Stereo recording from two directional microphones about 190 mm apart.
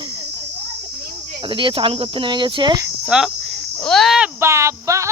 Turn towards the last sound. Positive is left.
turn(degrees=-15)  # may be behind; listen again after turning